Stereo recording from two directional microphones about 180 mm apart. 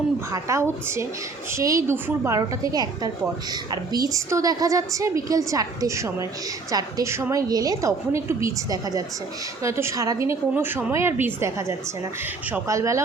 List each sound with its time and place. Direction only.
0.3 s a woman's voice: 15° right (ahead or behind)